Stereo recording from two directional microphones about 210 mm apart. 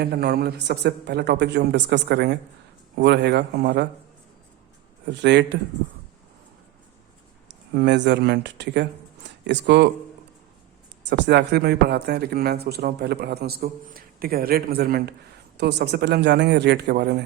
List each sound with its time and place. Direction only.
0.0 s speech: 50° right (ahead or behind)
5.0 s speech: 55° right (ahead or behind)
7.4 s speech: 55° right (ahead or behind)
11.1 s speech: 50° right (ahead or behind)